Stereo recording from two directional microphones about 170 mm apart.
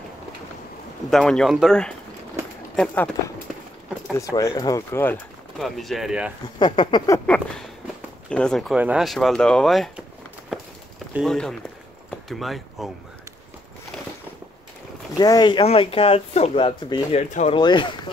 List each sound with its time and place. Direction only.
1.1 s speech: centre (ahead or behind)
4.2 s speech: 15° left (ahead or behind)
5.6 s speech: centre (ahead or behind)
6.6 s speech: 25° left (ahead or behind)
7.2 s a sound: 10° left (ahead or behind)
8.3 s speech: 5° left (ahead or behind)
10.5 s walk: 5° right (ahead or behind)
11.1 s speech: centre (ahead or behind)
15.1 s speech: 25° left (ahead or behind); by 17.6 s 45° left (ahead or behind)
17.6 s speech: 25° left (ahead or behind)